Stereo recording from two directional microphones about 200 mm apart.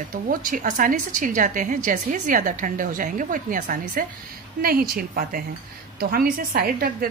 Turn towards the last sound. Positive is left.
turn(degrees=-50)  # may be behind; listen again after turning